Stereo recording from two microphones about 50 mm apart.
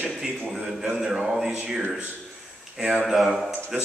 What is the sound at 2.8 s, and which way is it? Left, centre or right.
Speech, right.